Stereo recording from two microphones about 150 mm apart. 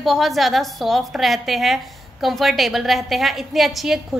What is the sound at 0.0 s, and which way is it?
A woman's voice, centre (ahead or behind).